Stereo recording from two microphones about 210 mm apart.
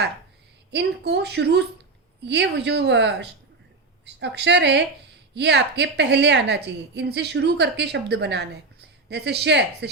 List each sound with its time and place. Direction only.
0.7 s a woman's voice: 55° right (ahead or behind)